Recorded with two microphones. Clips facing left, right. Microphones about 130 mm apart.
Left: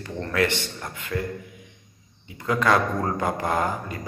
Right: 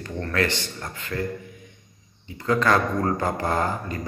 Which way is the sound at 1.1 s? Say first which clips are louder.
Even; 5° left (ahead or behind).